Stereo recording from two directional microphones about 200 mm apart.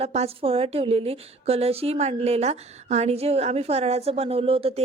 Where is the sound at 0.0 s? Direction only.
30° right (ahead or behind).